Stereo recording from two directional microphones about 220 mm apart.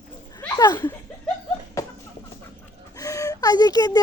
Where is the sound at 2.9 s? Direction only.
15° left (ahead or behind).